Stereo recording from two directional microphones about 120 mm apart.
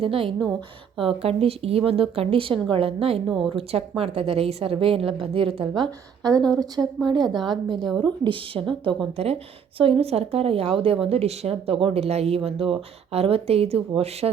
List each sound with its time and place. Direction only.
0.0 s a woman's voice: 50° right (ahead or behind)
6.8 s speech: 25° right (ahead or behind)
7.4 s a woman's voice: 40° right (ahead or behind)
9.1 s speech: 60° right (ahead or behind)